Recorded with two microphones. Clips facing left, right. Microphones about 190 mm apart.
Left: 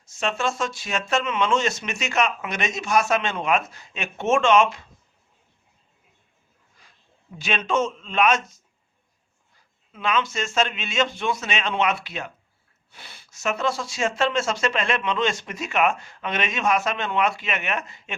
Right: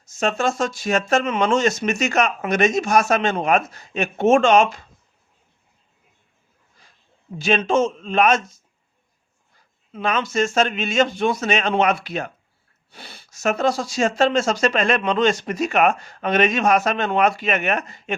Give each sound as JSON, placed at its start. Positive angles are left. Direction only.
{"t": 0.0, "sound": "speech", "side_deg": -45}
{"t": 7.4, "sound": "speech", "side_deg": -40}
{"t": 9.9, "sound": "speech", "side_deg": -40}